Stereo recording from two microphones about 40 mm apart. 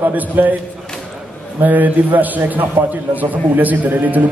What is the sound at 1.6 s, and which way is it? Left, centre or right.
A man's voice, right.